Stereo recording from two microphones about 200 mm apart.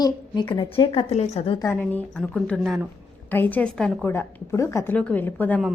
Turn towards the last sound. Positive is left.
turn(degrees=5)  # may be behind; listen again after turning